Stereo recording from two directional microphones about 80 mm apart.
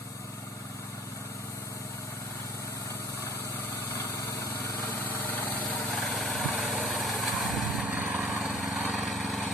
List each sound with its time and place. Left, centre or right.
3.9 s lawn mower: left
5.6 s lawn mower: centre
7.9 s lawn mower: centre
8.4 s lawn mower: centre